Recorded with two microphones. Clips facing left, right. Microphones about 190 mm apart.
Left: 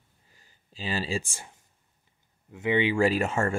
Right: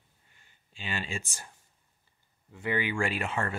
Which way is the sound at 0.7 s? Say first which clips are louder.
Left 6 dB; 35° left (ahead or behind).